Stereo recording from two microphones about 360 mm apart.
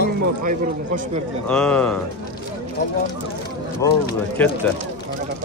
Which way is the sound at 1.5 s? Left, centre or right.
Centre.